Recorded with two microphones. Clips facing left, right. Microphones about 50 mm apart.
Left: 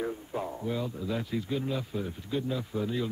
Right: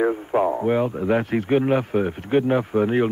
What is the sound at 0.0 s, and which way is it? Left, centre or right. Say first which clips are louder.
A man's voice: right 14 dB; right.